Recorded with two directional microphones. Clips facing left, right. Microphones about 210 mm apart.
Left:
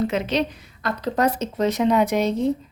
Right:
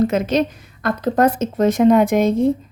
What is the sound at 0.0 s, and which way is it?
A woman's voice, 45° right (ahead or behind).